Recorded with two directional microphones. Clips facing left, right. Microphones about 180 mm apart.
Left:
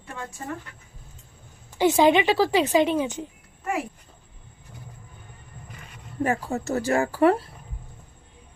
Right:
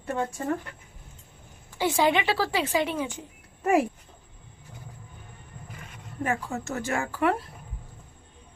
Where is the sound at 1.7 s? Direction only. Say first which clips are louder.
Left 5 dB; 20° left (ahead or behind).